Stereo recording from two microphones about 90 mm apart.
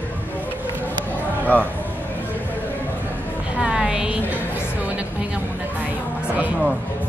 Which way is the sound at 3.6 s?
10° right (ahead or behind).